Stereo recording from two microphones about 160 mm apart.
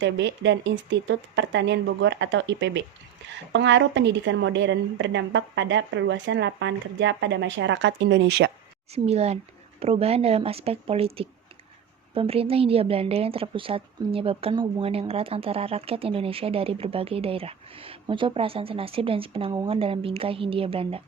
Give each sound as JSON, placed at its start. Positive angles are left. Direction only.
{"t": 0.2, "sound": "a woman's voice", "side_deg": -90}
{"t": 8.9, "sound": "speech", "side_deg": -40}